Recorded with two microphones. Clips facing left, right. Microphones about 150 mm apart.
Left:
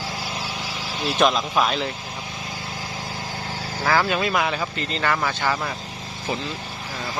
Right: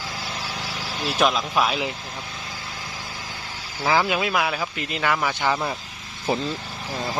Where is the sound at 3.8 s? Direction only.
10° right (ahead or behind).